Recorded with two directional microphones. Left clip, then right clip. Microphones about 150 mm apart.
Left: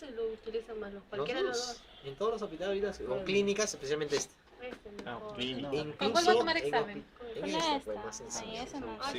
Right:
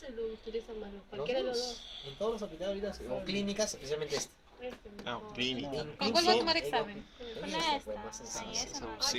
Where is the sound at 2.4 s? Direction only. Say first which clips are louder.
Left 3 dB; 55° left (ahead or behind).